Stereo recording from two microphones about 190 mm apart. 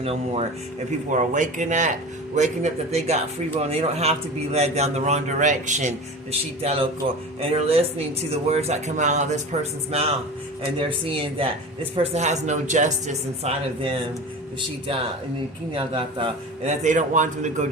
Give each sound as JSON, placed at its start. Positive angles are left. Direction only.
{"t": 0.0, "sound": "a man's voice", "side_deg": -30}
{"t": 15.7, "sound": "a man's voice", "side_deg": -30}
{"t": 16.8, "sound": "speech", "side_deg": -40}